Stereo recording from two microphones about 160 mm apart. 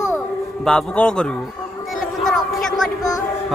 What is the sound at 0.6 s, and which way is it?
Speech, 5° left (ahead or behind).